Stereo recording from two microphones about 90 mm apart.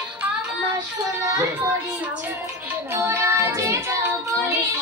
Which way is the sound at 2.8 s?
30° right (ahead or behind).